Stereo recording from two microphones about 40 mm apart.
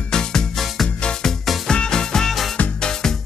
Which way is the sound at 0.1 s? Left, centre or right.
Centre.